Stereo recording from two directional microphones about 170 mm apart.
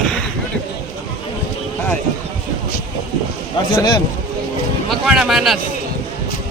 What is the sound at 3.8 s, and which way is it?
Speech, 25° left (ahead or behind).